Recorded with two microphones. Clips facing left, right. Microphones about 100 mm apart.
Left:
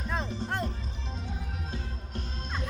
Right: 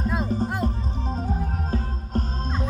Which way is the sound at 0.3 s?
45° right (ahead or behind).